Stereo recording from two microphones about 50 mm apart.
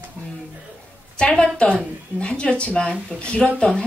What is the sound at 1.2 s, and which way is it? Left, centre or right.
Speech, left.